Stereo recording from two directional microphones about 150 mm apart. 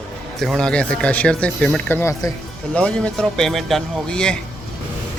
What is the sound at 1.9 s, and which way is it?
Speech, 20° left (ahead or behind).